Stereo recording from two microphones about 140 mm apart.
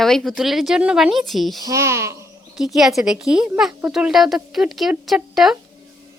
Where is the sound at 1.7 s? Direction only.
20° right (ahead or behind).